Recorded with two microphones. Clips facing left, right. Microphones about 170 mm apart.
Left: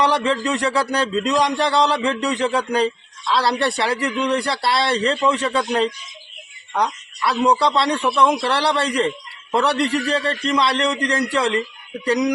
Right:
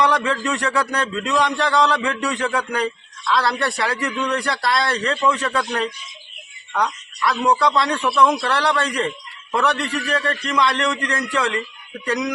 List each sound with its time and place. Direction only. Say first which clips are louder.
0.0 s a man's voice: left 1 dB; 30° left (ahead or behind)